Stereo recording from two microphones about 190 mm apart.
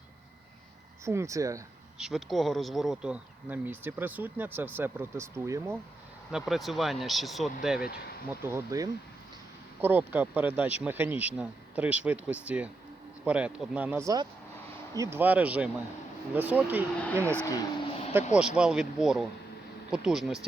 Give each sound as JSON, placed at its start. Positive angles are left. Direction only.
{"t": 1.0, "sound": "speech", "side_deg": -15}
{"t": 2.0, "sound": "speech", "side_deg": 0}
{"t": 6.3, "sound": "speech", "side_deg": 0}
{"t": 8.3, "sound": "speech", "side_deg": -15}
{"t": 17.0, "sound": "speech", "side_deg": 10}
{"t": 18.3, "sound": "speech", "side_deg": -5}